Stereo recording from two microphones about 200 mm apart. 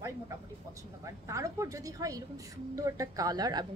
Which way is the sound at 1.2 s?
15° right (ahead or behind).